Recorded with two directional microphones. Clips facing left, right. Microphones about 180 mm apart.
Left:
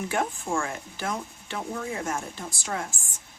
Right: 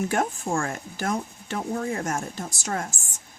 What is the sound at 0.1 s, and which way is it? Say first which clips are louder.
Speech: right 2 dB; 45° right (ahead or behind).